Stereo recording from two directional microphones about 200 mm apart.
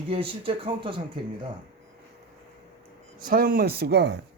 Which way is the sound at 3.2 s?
45° right (ahead or behind).